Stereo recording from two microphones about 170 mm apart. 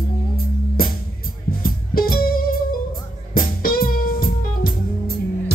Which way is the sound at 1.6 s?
60° left (ahead or behind).